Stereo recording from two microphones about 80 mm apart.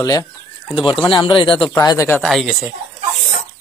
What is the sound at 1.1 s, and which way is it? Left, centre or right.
Speech, left.